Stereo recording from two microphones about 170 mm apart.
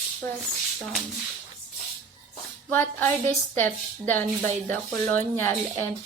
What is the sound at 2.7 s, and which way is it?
A woman's voice, 10° left (ahead or behind).